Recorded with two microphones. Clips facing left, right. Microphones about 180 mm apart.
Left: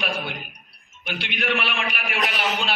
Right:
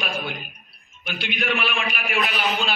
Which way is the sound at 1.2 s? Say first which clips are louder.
Right 1 dB; 70° left (ahead or behind).